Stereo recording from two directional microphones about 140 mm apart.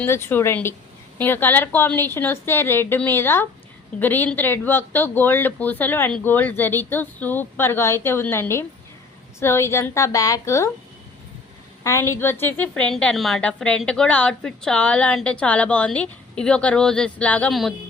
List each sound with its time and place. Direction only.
0.0 s a woman's voice: 15° left (ahead or behind)
11.8 s a woman's voice: 20° left (ahead or behind)
17.5 s a sound: centre (ahead or behind)